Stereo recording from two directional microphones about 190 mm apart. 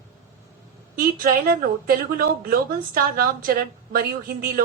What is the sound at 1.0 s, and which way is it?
A woman's voice, 50° right (ahead or behind).